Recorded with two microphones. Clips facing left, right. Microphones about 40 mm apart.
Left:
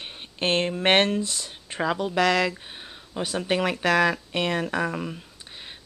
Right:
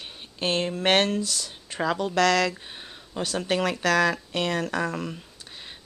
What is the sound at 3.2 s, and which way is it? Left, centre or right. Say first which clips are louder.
Speech: left 1 dB; centre.